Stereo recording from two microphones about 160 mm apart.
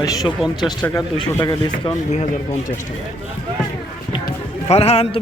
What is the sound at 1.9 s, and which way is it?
Speech, 45° left (ahead or behind).